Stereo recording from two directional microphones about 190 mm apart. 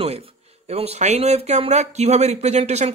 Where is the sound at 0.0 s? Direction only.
30° right (ahead or behind).